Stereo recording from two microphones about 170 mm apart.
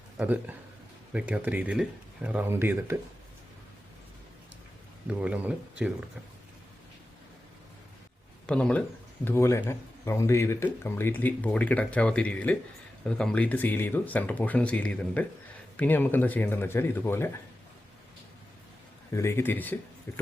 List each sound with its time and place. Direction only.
0.2 s speech: 10° right (ahead or behind)
5.0 s speech: 5° right (ahead or behind)
8.4 s speech: 5° left (ahead or behind)
19.1 s speech: 15° left (ahead or behind)